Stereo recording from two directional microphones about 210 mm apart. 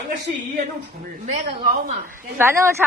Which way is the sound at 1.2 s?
35° right (ahead or behind).